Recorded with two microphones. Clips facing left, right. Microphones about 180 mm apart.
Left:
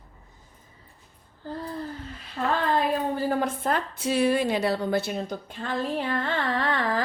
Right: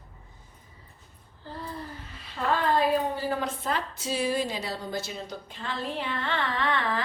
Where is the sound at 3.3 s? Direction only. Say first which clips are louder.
Left 4 dB; 50° left (ahead or behind).